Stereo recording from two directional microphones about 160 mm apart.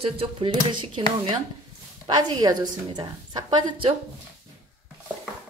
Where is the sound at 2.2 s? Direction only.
25° right (ahead or behind).